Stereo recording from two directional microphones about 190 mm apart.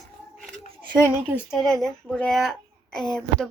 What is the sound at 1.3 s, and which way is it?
A woman's voice, centre (ahead or behind).